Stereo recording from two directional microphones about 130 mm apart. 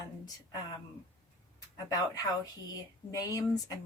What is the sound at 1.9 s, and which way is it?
Speech, 30° left (ahead or behind).